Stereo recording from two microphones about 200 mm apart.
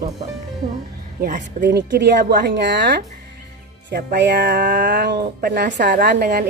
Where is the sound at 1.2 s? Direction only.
40° right (ahead or behind).